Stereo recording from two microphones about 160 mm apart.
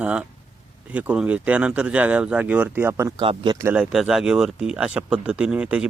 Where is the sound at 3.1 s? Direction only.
30° right (ahead or behind).